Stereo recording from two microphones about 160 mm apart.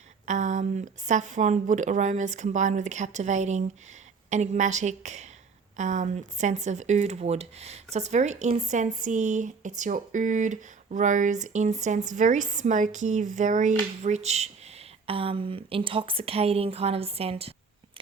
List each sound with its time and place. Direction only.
0.3 s a woman's voice: 45° right (ahead or behind)